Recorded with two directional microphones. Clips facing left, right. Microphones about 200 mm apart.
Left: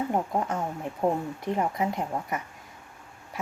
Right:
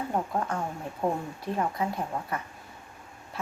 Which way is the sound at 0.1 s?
20° left (ahead or behind).